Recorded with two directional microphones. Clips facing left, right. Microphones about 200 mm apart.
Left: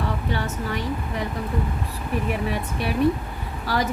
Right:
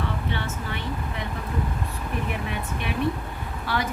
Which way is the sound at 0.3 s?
40° left (ahead or behind).